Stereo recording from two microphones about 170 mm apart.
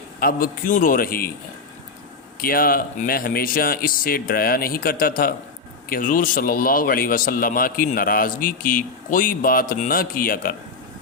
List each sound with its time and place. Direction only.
0.2 s a man's voice: 55° left (ahead or behind)
2.4 s a man's voice: 60° left (ahead or behind)